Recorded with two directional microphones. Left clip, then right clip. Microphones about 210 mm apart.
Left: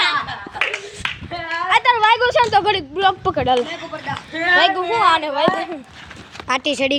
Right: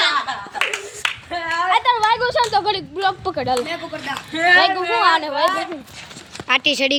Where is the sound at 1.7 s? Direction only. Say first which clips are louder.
Left 3 dB; 20° left (ahead or behind).